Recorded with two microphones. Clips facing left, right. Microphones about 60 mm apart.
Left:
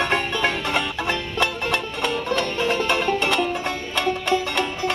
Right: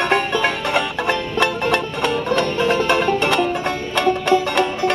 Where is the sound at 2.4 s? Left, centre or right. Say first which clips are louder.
Right 5 dB; right.